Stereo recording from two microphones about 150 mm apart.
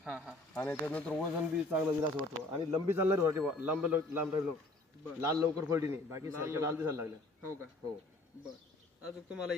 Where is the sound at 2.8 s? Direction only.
15° right (ahead or behind).